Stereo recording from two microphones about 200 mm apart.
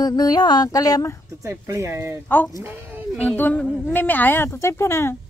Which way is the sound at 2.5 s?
10° right (ahead or behind).